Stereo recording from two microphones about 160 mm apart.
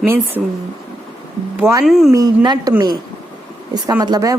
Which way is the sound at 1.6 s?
20° right (ahead or behind).